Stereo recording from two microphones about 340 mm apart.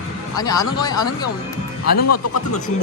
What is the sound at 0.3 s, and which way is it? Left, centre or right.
Speech, centre.